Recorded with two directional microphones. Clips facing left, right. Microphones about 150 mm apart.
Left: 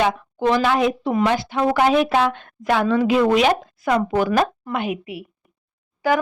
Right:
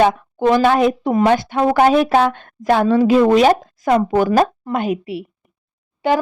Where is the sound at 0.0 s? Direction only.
50° right (ahead or behind).